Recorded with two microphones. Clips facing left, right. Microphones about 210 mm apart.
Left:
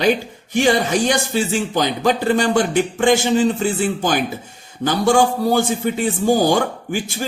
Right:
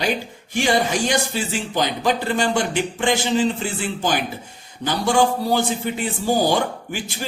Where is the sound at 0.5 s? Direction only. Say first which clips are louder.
Left 4 dB; 50° left (ahead or behind).